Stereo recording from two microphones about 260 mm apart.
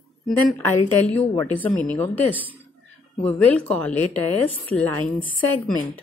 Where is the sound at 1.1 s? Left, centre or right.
Left.